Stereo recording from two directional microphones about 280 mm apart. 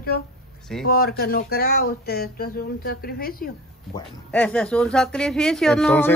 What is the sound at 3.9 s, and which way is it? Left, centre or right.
Speech, centre.